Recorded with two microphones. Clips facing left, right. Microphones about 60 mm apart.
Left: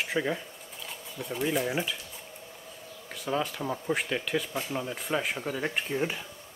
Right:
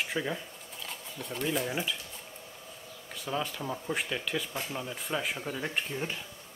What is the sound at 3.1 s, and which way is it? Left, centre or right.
Speech, centre.